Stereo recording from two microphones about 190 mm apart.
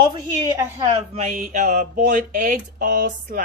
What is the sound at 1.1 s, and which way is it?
Speech, 40° right (ahead or behind).